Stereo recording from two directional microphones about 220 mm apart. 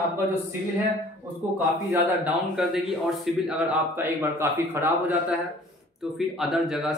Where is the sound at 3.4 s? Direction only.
5° right (ahead or behind).